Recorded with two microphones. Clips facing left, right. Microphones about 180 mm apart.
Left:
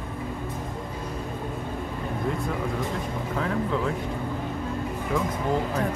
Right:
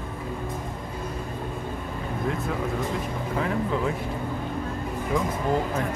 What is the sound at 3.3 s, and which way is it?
Speech, 5° right (ahead or behind).